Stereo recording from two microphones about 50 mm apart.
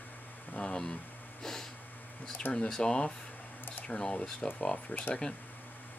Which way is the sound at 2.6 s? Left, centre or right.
Centre.